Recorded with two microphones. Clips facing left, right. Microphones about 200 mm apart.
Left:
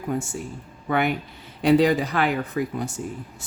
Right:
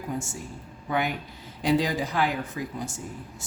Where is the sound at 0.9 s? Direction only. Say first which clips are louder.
Left 5 dB; 60° left (ahead or behind).